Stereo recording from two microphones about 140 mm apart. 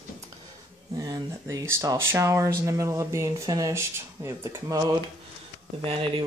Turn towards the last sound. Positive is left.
turn(degrees=-40)  # may be behind; listen again after turning